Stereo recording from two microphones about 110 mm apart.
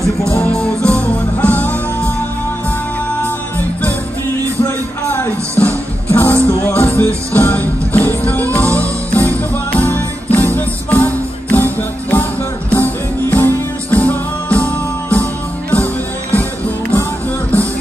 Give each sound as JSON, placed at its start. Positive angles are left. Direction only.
{"t": 0.3, "sound": "music", "side_deg": 10}
{"t": 4.6, "sound": "a sound", "side_deg": 25}
{"t": 5.6, "sound": "music", "side_deg": 15}